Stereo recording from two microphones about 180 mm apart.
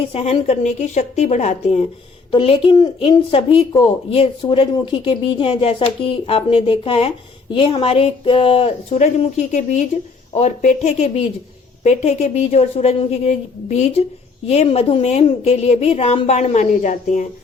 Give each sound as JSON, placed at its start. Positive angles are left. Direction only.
{"t": 0.0, "sound": "speech", "side_deg": 30}